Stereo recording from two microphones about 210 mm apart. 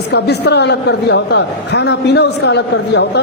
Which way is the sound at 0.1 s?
55° left (ahead or behind).